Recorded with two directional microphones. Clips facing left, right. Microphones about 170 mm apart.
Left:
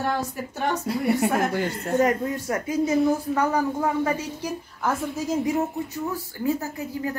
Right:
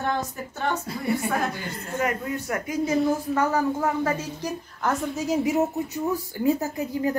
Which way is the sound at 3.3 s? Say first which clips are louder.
Even; 15° left (ahead or behind).